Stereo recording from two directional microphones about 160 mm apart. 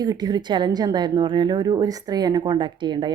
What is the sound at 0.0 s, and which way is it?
A woman's voice, 25° right (ahead or behind).